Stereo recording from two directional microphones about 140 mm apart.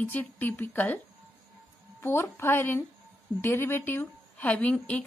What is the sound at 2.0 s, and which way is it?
A woman's voice, 15° left (ahead or behind).